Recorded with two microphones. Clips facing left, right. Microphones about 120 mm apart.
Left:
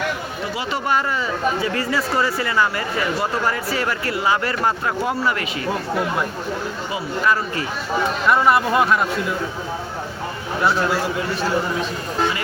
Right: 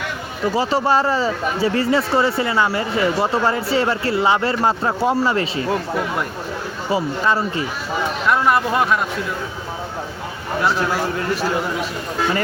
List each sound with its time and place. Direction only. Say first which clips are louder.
0.5 s speech: right 5 dB; 35° right (ahead or behind)
6.9 s speech: right 3 dB; 30° right (ahead or behind)
8.3 s speech: left 1 dB; centre (ahead or behind)